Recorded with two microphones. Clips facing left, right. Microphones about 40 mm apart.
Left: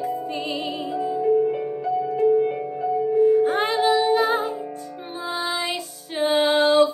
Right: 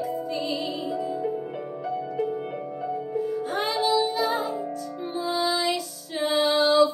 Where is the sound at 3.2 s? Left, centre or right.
Left.